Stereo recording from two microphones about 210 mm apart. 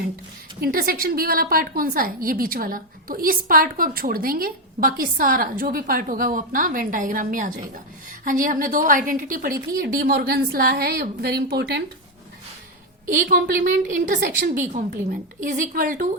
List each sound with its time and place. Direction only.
0.6 s a woman's voice: 45° right (ahead or behind)
13.1 s a woman's voice: 40° right (ahead or behind)